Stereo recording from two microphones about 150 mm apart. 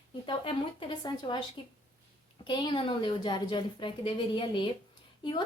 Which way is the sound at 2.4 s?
30° left (ahead or behind).